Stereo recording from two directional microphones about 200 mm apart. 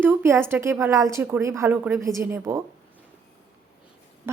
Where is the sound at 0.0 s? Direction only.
10° right (ahead or behind).